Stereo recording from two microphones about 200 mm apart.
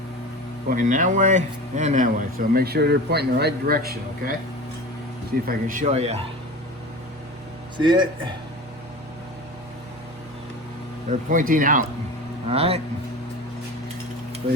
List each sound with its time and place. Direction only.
0.7 s speech: 40° right (ahead or behind)
5.5 s a man's voice: 40° right (ahead or behind)
7.8 s a man's voice: 25° right (ahead or behind)
11.1 s a man's voice: 40° right (ahead or behind)
12.5 s a man's voice: 30° right (ahead or behind)